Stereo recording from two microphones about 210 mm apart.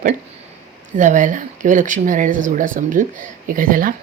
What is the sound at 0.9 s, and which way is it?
Speech, 35° right (ahead or behind).